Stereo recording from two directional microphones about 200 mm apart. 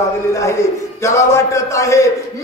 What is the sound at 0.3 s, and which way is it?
A man's voice, 15° left (ahead or behind).